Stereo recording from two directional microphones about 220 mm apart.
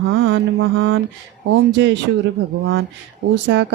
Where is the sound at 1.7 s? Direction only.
55° right (ahead or behind).